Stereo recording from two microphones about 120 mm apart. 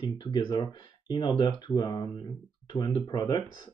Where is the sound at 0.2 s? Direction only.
40° left (ahead or behind).